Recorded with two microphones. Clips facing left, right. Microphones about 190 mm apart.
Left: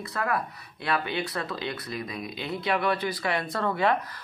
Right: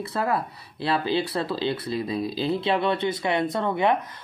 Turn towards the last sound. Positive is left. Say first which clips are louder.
# right 3 dB
turn(degrees=-20)  # may be behind; listen again after turning